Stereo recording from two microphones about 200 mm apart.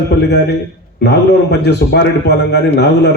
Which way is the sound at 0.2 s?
55° left (ahead or behind).